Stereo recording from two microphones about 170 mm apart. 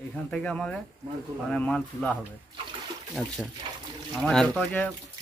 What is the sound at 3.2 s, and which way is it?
Speech, 10° right (ahead or behind).